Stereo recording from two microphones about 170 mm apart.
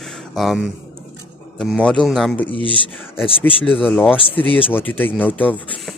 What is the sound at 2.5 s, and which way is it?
Speech, 30° left (ahead or behind).